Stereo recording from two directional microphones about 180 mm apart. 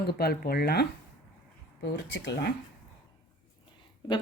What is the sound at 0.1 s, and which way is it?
Speech, 60° left (ahead or behind).